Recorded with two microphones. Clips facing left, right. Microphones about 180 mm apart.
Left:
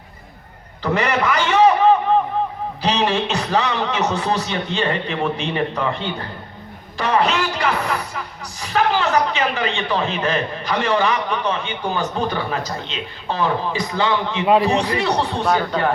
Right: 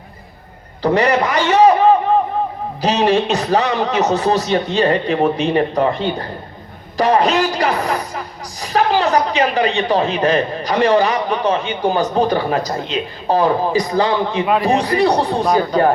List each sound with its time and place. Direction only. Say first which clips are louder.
0.8 s a man's voice: right 5 dB; 35° right (ahead or behind)
15.4 s speech: right 3 dB; 15° right (ahead or behind)